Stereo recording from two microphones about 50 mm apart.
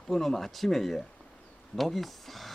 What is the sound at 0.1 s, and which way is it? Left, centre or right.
Speech, centre.